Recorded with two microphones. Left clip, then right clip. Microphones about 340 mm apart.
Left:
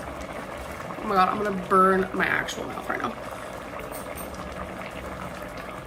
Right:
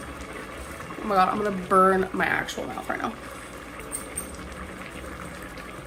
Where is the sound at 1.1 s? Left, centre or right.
Centre.